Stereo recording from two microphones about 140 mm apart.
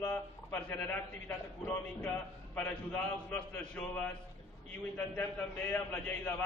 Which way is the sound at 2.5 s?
15° left (ahead or behind).